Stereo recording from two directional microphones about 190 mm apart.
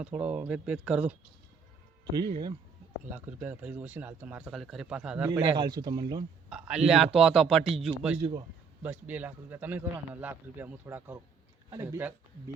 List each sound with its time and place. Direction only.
0.0 s a man's voice: 5° right (ahead or behind)
2.1 s speech: 20° right (ahead or behind)
3.1 s a man's voice: 10° right (ahead or behind)
5.3 s speech: 20° right (ahead or behind)
6.5 s a man's voice: 5° right (ahead or behind)
8.2 s speech: 25° right (ahead or behind)
8.8 s a man's voice: 10° right (ahead or behind)